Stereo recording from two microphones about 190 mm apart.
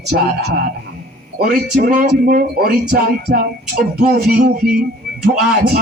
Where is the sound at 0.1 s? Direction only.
65° right (ahead or behind).